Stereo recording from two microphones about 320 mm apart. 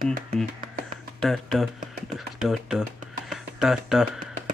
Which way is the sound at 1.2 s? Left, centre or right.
Centre.